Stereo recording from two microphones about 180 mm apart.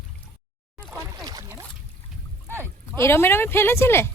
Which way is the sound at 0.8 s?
15° right (ahead or behind).